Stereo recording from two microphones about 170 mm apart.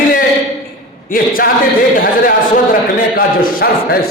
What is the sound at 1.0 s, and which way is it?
Speech, 55° left (ahead or behind).